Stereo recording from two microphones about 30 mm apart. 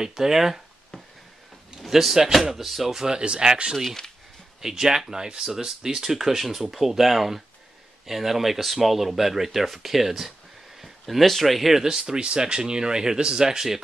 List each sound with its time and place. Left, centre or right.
0.0 s speech: centre
1.8 s speech: centre
3.1 s speech: right
4.6 s speech: centre
10.8 s speech: centre
11.7 s speech: centre
12.2 s speech: right